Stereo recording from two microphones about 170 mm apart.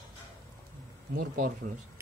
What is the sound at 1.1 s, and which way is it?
Speech, 55° right (ahead or behind).